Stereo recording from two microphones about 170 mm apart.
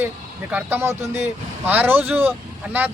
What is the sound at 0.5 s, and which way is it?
Speech, 15° right (ahead or behind).